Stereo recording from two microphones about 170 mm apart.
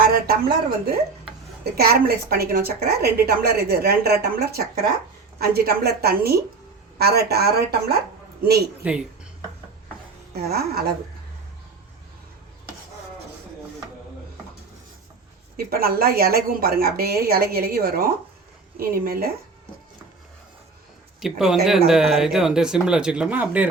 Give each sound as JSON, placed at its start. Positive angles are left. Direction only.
{"t": 0.0, "sound": "a sound", "side_deg": -60}
{"t": 1.7, "sound": "a woman's voice", "side_deg": -65}
{"t": 8.8, "sound": "speech", "side_deg": -5}
{"t": 10.3, "sound": "a woman's voice", "side_deg": -65}
{"t": 15.5, "sound": "a woman's voice", "side_deg": -60}
{"t": 21.2, "sound": "speech", "side_deg": 0}